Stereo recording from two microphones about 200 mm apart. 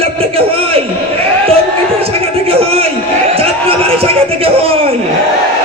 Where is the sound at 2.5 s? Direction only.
30° right (ahead or behind).